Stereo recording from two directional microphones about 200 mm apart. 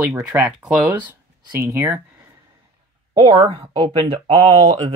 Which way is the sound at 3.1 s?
25° right (ahead or behind).